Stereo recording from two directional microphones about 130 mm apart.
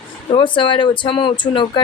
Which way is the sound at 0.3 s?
40° left (ahead or behind).